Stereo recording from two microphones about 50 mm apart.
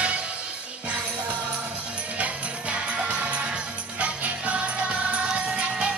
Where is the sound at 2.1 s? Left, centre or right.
Right.